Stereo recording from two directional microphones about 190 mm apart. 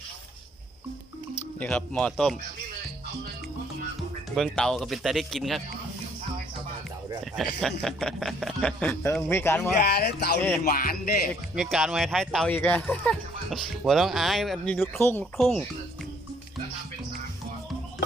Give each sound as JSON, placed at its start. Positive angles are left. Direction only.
{"t": 1.5, "sound": "speech", "side_deg": 5}
{"t": 4.4, "sound": "speech", "side_deg": 5}
{"t": 7.6, "sound": "speech", "side_deg": 0}
{"t": 9.8, "sound": "speech", "side_deg": 55}
{"t": 11.5, "sound": "speech", "side_deg": 0}